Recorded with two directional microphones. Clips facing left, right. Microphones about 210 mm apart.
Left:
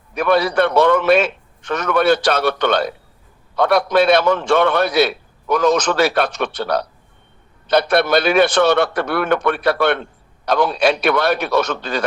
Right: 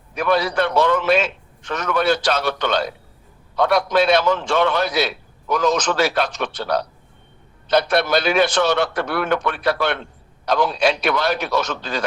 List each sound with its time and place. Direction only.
0.1 s a man's voice: 60° left (ahead or behind)